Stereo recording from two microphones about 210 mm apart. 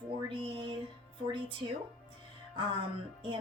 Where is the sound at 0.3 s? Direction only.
25° right (ahead or behind).